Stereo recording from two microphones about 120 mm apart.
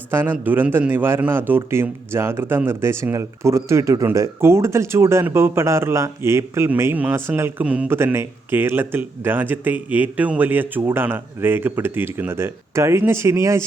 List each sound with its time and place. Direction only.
0.1 s a man's voice: 15° right (ahead or behind)
7.9 s speech: 20° right (ahead or behind)